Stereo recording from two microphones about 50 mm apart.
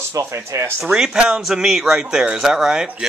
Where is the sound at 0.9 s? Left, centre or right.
Centre.